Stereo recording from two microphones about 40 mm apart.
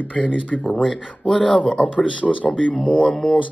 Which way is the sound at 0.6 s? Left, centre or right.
Centre.